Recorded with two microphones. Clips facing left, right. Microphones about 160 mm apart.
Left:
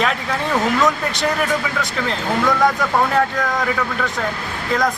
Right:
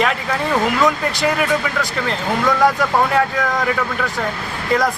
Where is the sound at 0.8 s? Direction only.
Centre (ahead or behind).